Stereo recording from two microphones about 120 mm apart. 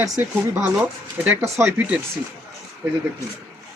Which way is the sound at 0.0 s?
15° right (ahead or behind).